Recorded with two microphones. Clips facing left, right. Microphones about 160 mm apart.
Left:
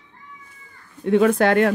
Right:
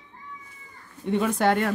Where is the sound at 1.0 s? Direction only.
90° left.